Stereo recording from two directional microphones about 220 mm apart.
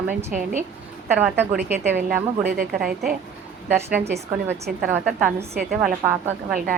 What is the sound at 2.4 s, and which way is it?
Speech, 40° right (ahead or behind).